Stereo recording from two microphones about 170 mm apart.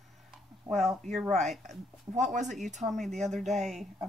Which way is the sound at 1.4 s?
40° right (ahead or behind).